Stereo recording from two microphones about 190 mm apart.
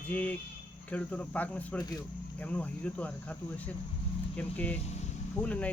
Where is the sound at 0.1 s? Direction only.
10° left (ahead or behind).